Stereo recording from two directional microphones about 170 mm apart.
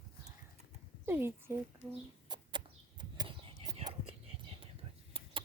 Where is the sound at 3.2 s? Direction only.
25° right (ahead or behind).